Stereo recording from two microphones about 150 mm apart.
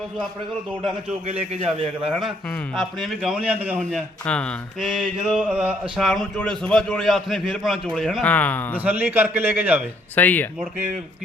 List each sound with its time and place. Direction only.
1.3 s a man's voice: 45° right (ahead or behind)
2.0 s speech: centre (ahead or behind)
3.8 s speech: 5° left (ahead or behind)
8.8 s a man's voice: 10° right (ahead or behind)
10.2 s speech: 10° left (ahead or behind)